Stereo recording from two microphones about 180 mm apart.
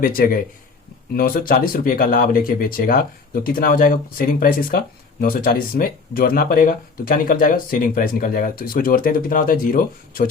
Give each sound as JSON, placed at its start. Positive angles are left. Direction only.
{"t": 0.0, "sound": "speech", "side_deg": 50}